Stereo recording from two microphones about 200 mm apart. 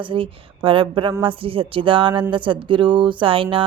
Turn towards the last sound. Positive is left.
turn(degrees=-25)  # may be behind; listen again after turning